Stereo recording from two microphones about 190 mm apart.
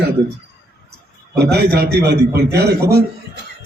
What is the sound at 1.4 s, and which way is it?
Speech, 60° right (ahead or behind).